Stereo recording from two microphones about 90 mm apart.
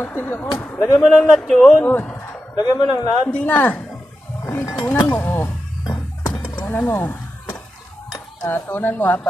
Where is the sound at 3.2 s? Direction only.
20° left (ahead or behind).